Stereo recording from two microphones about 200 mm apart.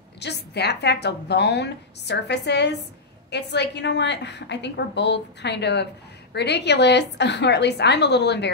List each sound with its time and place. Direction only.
0.2 s a woman's voice: 55° left (ahead or behind)